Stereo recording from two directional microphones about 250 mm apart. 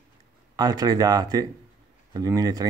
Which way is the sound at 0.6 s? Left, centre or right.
Centre.